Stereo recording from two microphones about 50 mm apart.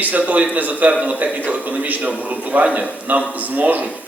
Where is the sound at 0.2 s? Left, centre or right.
Right.